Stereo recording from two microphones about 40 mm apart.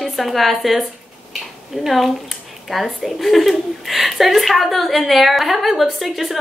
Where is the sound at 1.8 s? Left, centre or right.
Centre.